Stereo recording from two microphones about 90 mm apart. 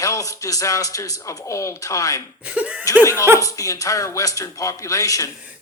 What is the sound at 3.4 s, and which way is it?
Speech, 40° left (ahead or behind).